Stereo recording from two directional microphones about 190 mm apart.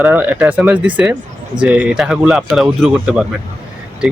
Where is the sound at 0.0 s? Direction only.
10° right (ahead or behind).